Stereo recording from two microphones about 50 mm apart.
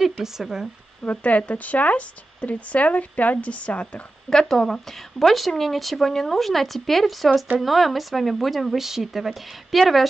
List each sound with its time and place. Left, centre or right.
0.2 s speech: centre
1.0 s speech: left
4.3 s speech: centre